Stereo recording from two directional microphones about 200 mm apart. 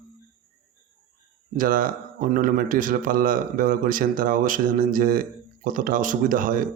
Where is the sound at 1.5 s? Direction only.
45° right (ahead or behind).